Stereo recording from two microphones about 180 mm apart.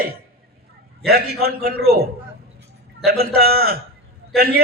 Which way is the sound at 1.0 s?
60° right (ahead or behind).